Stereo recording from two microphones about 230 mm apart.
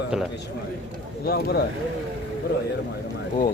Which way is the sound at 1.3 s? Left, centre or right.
Left.